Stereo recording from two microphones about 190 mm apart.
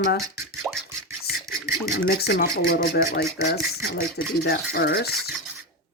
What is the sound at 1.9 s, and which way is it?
Speech, 55° left (ahead or behind).